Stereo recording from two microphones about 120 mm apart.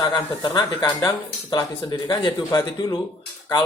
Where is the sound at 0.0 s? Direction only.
35° left (ahead or behind).